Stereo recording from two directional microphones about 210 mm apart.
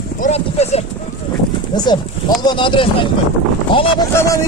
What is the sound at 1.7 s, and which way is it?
Speech, 20° left (ahead or behind).